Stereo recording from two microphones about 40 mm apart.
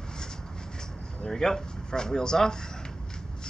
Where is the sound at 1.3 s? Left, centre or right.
Centre.